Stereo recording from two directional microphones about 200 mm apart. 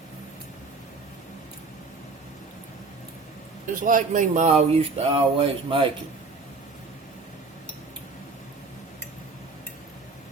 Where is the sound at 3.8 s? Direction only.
40° right (ahead or behind).